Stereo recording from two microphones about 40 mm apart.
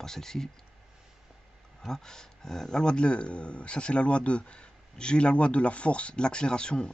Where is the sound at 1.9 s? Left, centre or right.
Centre.